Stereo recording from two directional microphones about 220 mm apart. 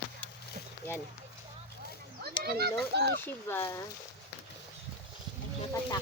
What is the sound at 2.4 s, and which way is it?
Speech, 45° right (ahead or behind).